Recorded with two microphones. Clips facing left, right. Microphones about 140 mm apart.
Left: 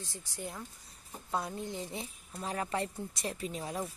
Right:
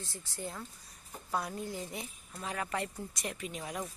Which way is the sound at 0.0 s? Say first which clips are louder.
Even; 15° left (ahead or behind).